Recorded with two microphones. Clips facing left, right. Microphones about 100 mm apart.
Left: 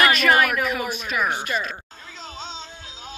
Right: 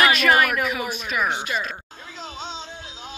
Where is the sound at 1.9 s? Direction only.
45° right (ahead or behind).